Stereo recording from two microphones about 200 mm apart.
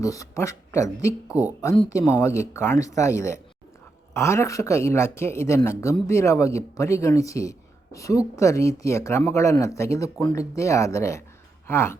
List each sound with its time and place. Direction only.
0.0 s speech: 15° left (ahead or behind)
1.3 s speech: 10° right (ahead or behind)
1.9 s speech: 15° left (ahead or behind)